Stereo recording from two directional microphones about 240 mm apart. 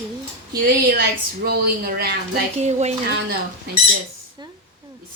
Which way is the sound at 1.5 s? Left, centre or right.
Right.